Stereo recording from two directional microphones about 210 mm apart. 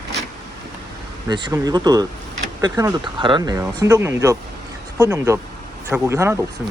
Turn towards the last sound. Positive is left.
turn(degrees=-15)  # may be behind; listen again after turning